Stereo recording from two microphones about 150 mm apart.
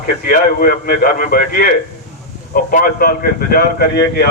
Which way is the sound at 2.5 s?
65° left (ahead or behind).